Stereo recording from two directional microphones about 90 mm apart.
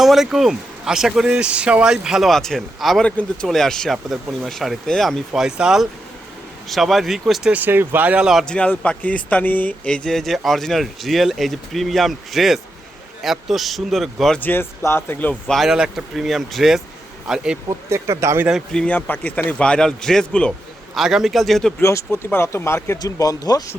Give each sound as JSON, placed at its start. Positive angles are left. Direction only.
{"t": 0.0, "sound": "speech", "side_deg": -5}
{"t": 7.5, "sound": "speech", "side_deg": -20}
{"t": 8.4, "sound": "speech", "side_deg": 10}
{"t": 14.3, "sound": "speech", "side_deg": 20}
{"t": 15.5, "sound": "speech", "side_deg": -5}
{"t": 17.7, "sound": "speech", "side_deg": -35}
{"t": 18.7, "sound": "a man's voice", "side_deg": 10}
{"t": 18.9, "sound": "a man's voice", "side_deg": 20}
{"t": 20.9, "sound": "speech", "side_deg": -5}
{"t": 21.8, "sound": "speech", "side_deg": 30}
{"t": 23.0, "sound": "speech", "side_deg": 40}